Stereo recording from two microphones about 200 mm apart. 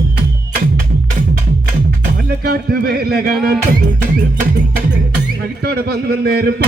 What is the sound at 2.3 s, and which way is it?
Speech, 50° right (ahead or behind).